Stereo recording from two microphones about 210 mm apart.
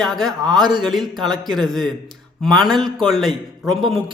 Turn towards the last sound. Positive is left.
turn(degrees=0)  # may be behind; listen again after turning